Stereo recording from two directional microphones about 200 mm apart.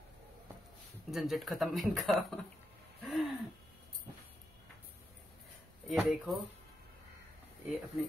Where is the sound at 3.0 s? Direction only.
Centre (ahead or behind).